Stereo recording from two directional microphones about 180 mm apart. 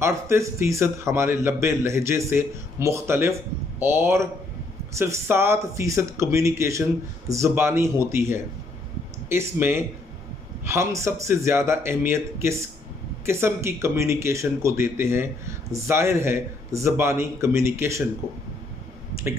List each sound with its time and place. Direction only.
0.0 s speech: 15° right (ahead or behind)